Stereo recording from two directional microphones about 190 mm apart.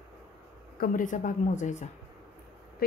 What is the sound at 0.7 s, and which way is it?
A woman's voice, 45° left (ahead or behind).